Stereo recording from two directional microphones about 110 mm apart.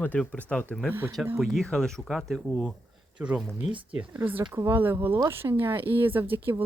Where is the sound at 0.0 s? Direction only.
15° left (ahead or behind).